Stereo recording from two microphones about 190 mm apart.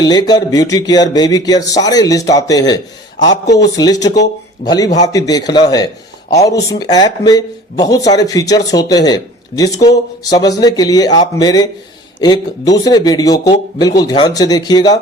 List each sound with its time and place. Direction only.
0.0 s speech: 20° left (ahead or behind)